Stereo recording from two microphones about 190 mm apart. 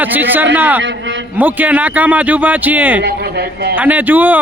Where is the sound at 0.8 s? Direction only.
70° right (ahead or behind).